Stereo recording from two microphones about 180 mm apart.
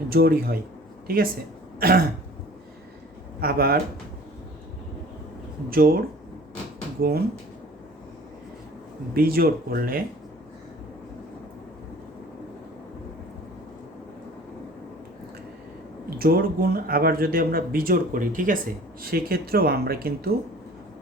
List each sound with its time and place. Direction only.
0.1 s speech: 55° right (ahead or behind)
3.4 s speech: 55° right (ahead or behind)
5.7 s speech: 55° right (ahead or behind)
7.0 s speech: 55° right (ahead or behind)
9.1 s speech: 55° right (ahead or behind)
16.1 s speech: 55° right (ahead or behind)